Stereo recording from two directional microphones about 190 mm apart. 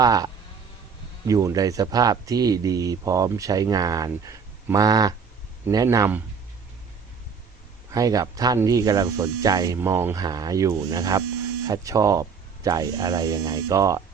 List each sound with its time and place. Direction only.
0.0 s speech: 20° right (ahead or behind)
1.3 s speech: 20° right (ahead or behind)
7.9 s speech: 20° right (ahead or behind)